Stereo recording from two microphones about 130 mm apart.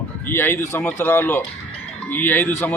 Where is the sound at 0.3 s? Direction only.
15° left (ahead or behind).